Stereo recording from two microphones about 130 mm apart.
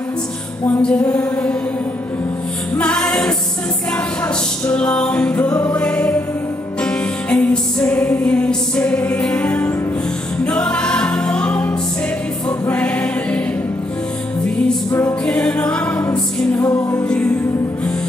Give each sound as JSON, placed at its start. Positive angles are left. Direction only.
{"t": 0.7, "sound": "music", "side_deg": 10}
{"t": 2.8, "sound": "music", "side_deg": 5}
{"t": 12.4, "sound": "choir", "side_deg": 10}
{"t": 14.9, "sound": "music", "side_deg": 20}
{"t": 15.4, "sound": "music", "side_deg": 5}
{"t": 16.6, "sound": "music", "side_deg": 25}
{"t": 16.9, "sound": "music", "side_deg": 10}